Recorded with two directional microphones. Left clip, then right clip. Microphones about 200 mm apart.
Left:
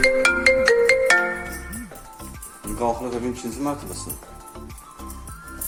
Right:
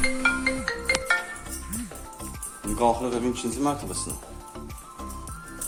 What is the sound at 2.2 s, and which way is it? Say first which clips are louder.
Music: right 1 dB; 5° right (ahead or behind).